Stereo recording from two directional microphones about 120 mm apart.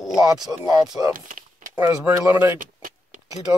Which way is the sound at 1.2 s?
90° right.